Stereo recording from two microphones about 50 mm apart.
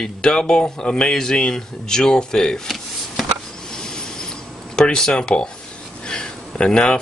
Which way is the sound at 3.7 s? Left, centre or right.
Centre.